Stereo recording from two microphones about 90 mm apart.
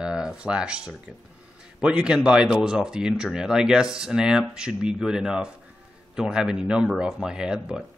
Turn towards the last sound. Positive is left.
turn(degrees=-10)  # may be behind; listen again after turning